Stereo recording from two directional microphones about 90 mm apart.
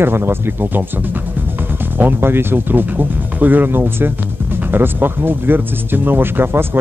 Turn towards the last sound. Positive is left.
turn(degrees=-25)  # may be behind; listen again after turning